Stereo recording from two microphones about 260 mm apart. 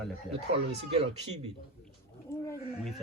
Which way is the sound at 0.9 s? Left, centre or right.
Right.